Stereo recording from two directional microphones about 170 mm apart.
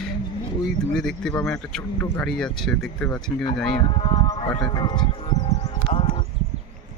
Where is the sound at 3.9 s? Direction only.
30° left (ahead or behind).